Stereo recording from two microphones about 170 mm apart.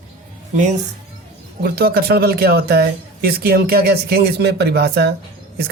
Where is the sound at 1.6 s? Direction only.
65° right (ahead or behind).